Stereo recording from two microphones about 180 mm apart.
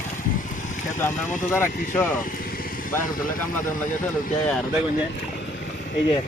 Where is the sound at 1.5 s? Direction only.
10° left (ahead or behind).